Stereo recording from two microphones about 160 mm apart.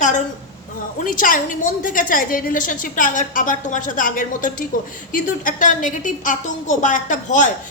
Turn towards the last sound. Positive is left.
turn(degrees=50)  # may be behind; listen again after turning